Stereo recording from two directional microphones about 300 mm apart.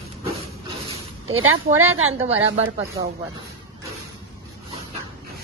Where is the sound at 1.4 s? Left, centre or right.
Right.